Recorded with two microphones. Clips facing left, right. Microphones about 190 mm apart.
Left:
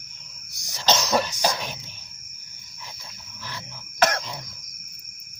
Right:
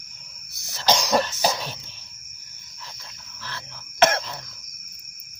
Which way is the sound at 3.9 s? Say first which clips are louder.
Right 3 dB; 25° right (ahead or behind).